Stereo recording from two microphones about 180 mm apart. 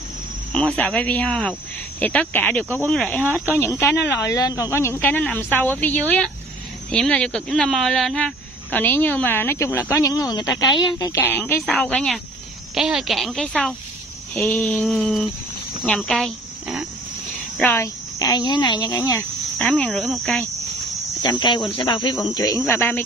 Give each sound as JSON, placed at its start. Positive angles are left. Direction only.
{"t": 0.5, "sound": "speech", "side_deg": 5}
{"t": 17.6, "sound": "speech", "side_deg": 10}
{"t": 21.2, "sound": "speech", "side_deg": 25}